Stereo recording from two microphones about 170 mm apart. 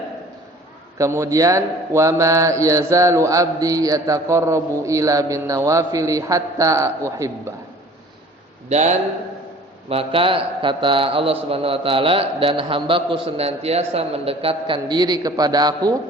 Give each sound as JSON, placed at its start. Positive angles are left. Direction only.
{"t": 0.9, "sound": "a man's voice", "side_deg": -20}
{"t": 8.7, "sound": "a man's voice", "side_deg": -45}